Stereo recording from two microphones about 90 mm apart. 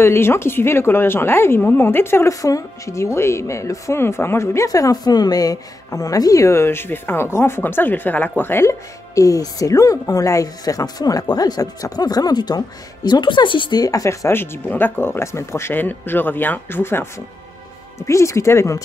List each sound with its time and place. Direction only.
0.0 s speech: 30° left (ahead or behind)
2.4 s speech: 40° left (ahead or behind)